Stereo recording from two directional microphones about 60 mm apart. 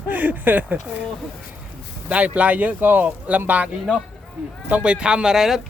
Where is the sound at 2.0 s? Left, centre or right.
Right.